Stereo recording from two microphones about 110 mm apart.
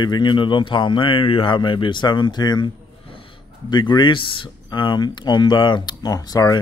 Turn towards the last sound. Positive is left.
turn(degrees=35)  # may be behind; listen again after turning